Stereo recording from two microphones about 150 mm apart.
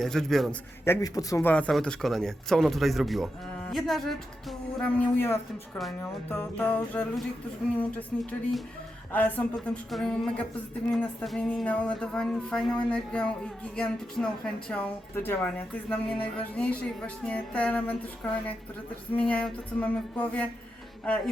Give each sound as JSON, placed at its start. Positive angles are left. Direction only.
{"t": 0.0, "sound": "speech", "side_deg": 0}
{"t": 0.9, "sound": "a man's voice", "side_deg": 20}
{"t": 1.5, "sound": "a woman's voice", "side_deg": 10}
{"t": 19.1, "sound": "a woman's voice", "side_deg": 10}